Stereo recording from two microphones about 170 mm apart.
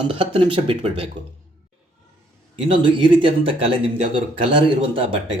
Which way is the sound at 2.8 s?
30° right (ahead or behind).